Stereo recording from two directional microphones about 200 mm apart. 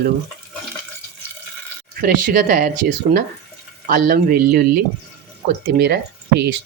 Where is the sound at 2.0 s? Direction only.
45° right (ahead or behind).